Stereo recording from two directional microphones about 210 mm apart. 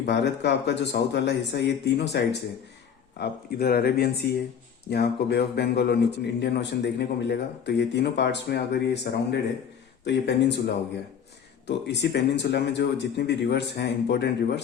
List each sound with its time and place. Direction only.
0.0 s a man's voice: 55° left (ahead or behind)
11.6 s a man's voice: 55° left (ahead or behind)